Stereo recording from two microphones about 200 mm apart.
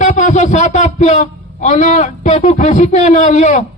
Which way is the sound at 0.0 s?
35° left (ahead or behind).